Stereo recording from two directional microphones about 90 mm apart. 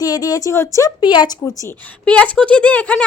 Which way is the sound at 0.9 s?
55° left (ahead or behind).